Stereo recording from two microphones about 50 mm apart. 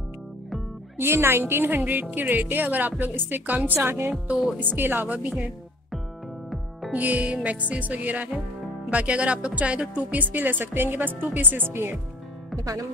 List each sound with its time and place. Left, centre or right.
0.9 s a woman's voice: right
1.9 s speech: right
6.9 s a woman's voice: right